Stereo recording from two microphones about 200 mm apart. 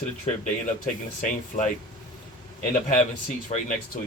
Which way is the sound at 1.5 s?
40° left (ahead or behind).